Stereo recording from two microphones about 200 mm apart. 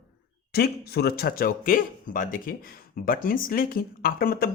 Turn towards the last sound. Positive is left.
turn(degrees=50)  # may be behind; listen again after turning